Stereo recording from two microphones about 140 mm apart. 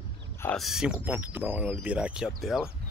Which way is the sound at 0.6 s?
5° right (ahead or behind).